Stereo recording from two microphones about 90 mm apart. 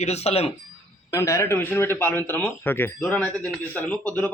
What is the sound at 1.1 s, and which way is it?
A man's voice, 35° left (ahead or behind).